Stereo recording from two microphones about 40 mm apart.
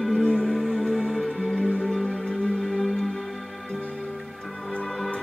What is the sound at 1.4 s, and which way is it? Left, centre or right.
Music, left.